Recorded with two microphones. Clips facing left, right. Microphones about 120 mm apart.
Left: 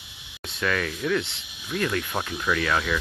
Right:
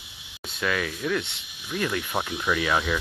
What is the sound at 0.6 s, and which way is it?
Speech, 5° right (ahead or behind).